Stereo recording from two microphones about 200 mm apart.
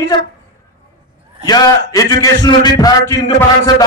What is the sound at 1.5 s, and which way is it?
A man's voice, 20° left (ahead or behind).